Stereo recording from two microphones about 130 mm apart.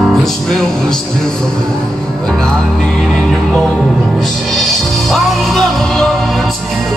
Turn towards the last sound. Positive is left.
turn(degrees=5)  # may be behind; listen again after turning